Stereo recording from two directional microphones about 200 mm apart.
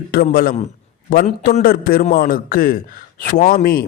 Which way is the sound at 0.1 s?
45° left (ahead or behind).